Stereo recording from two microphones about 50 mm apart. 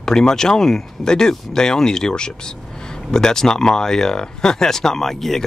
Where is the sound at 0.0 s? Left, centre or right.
Centre.